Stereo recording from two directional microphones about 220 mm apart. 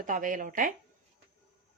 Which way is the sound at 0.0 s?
35° right (ahead or behind).